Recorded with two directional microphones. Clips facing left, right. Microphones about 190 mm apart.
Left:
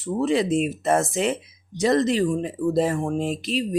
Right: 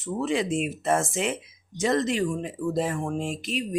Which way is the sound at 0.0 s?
35° left (ahead or behind).